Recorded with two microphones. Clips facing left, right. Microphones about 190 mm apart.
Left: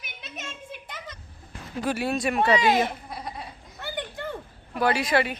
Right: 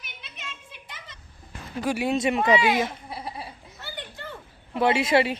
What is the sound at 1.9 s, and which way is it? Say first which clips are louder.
Speech: right 2 dB; 15° right (ahead or behind).